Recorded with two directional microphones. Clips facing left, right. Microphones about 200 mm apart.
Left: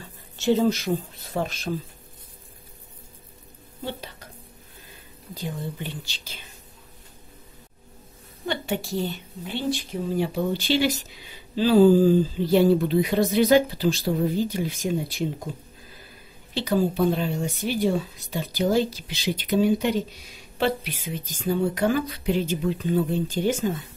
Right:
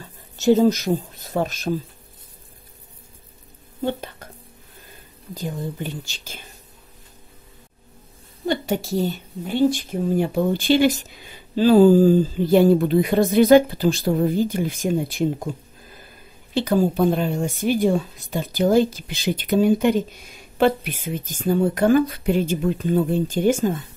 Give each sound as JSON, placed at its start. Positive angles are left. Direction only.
{"t": 0.4, "sound": "speech", "side_deg": -40}
{"t": 5.3, "sound": "a woman's voice", "side_deg": -45}
{"t": 8.5, "sound": "a woman's voice", "side_deg": -40}
{"t": 16.5, "sound": "a woman's voice", "side_deg": -50}